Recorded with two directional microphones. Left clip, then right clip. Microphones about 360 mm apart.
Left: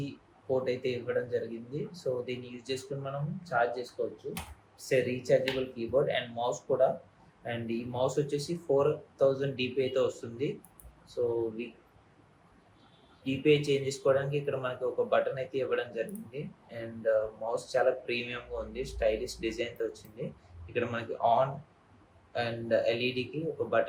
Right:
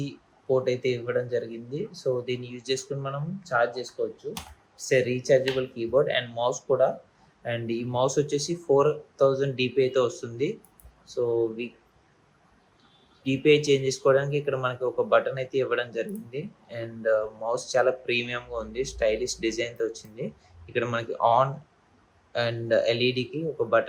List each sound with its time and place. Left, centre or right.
0.5 s speech: right
13.2 s speech: right